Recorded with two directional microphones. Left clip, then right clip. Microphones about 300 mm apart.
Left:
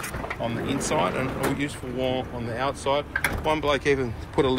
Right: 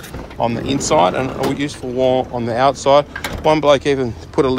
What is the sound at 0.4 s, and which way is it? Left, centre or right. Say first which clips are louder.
Speech: right 11 dB; centre.